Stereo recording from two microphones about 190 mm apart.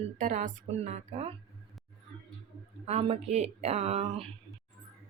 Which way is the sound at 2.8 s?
35° right (ahead or behind).